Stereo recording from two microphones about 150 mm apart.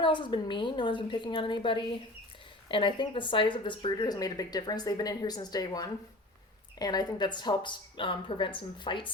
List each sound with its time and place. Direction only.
0.0 s a woman's voice: 30° left (ahead or behind)